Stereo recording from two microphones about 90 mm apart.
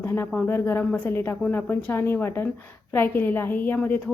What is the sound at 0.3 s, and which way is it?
A woman's voice, 25° left (ahead or behind).